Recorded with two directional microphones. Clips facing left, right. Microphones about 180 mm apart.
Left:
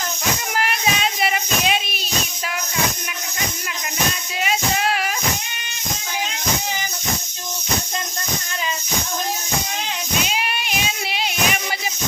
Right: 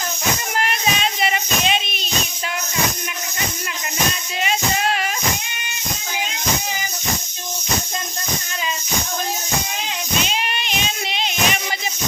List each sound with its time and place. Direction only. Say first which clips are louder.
0.5 s child singing: left 1 dB; 5° left (ahead or behind)
4.4 s music: even; 5° left (ahead or behind)
10.2 s a sound: even; 5° left (ahead or behind)